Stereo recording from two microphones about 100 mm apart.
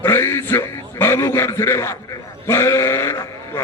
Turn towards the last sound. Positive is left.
turn(degrees=25)  # may be behind; listen again after turning